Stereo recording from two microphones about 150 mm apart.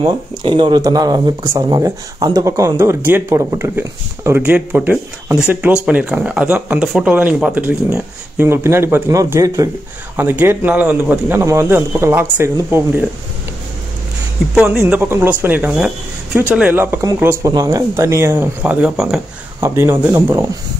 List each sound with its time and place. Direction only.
0.0 s speech: 35° right (ahead or behind); by 13.0 s 15° right (ahead or behind)
14.5 s speech: 5° right (ahead or behind)
19.6 s speech: 15° right (ahead or behind)